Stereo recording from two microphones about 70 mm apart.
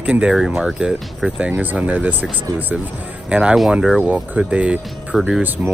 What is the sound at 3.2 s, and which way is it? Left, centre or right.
Speech, centre.